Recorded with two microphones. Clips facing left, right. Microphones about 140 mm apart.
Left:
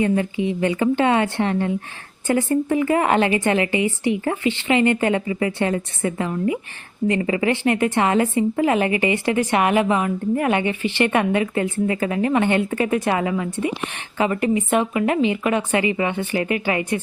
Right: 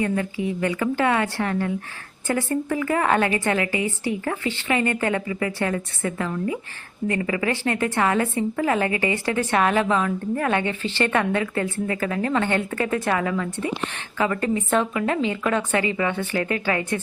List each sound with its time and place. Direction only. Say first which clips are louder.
0.0 s speech: left 4 dB; 20° left (ahead or behind)